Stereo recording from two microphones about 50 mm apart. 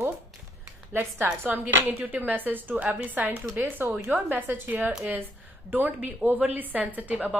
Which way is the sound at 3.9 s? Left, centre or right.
Right.